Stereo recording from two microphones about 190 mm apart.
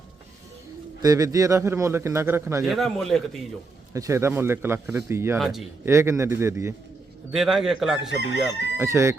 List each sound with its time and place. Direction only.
1.0 s speech: 20° right (ahead or behind)
2.6 s chicken: centre (ahead or behind)
3.9 s speech: 15° right (ahead or behind)
5.4 s chicken: centre (ahead or behind)
5.8 s speech: 15° right (ahead or behind)
7.3 s chicken: centre (ahead or behind)
8.8 s speech: 15° right (ahead or behind)